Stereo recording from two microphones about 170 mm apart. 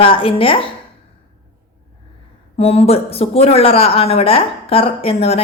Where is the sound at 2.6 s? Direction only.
35° left (ahead or behind).